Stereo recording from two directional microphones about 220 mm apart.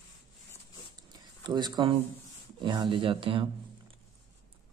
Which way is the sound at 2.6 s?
20° right (ahead or behind).